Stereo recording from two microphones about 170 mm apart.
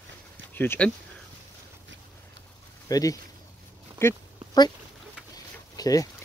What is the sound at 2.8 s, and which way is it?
Speech, 20° left (ahead or behind).